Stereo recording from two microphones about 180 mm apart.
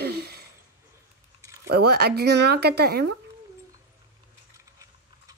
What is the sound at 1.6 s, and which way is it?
Speech, 60° right (ahead or behind).